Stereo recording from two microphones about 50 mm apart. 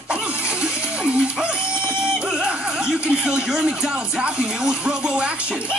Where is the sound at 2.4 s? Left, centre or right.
Centre.